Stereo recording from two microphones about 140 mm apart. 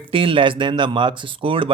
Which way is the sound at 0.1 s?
40° right (ahead or behind).